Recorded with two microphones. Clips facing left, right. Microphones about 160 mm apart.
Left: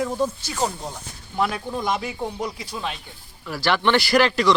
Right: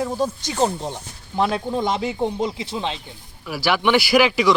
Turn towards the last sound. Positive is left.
turn(degrees=-5)  # may be behind; listen again after turning